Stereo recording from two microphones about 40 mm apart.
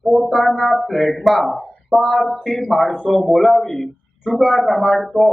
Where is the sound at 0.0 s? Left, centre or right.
Centre.